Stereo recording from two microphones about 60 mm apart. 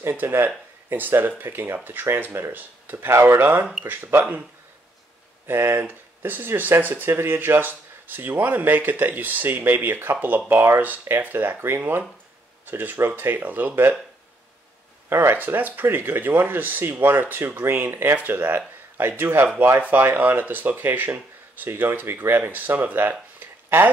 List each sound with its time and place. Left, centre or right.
0.0 s speech: right
5.5 s speech: right
15.0 s speech: right
23.4 s a sound: right